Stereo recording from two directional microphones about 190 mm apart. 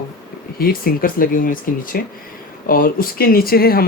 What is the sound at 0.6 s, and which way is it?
Speech, 50° left (ahead or behind).